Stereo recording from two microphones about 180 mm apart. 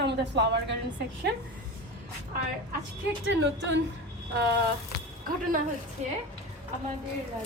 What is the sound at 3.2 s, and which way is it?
Speech, 85° right.